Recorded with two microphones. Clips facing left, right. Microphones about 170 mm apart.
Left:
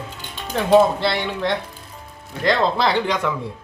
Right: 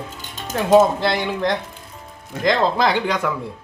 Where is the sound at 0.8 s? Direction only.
Centre (ahead or behind).